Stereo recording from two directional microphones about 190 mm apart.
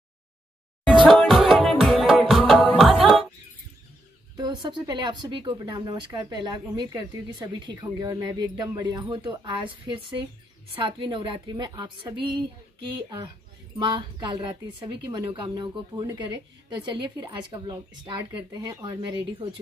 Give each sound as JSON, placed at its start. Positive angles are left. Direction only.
{"t": 1.0, "sound": "music", "side_deg": 0}
{"t": 4.4, "sound": "speech", "side_deg": -25}